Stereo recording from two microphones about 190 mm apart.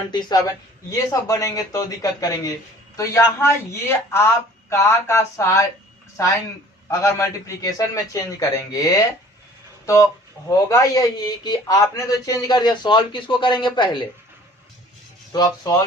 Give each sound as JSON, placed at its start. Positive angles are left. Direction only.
{"t": 0.1, "sound": "a man's voice", "side_deg": 20}
{"t": 15.3, "sound": "a man's voice", "side_deg": 20}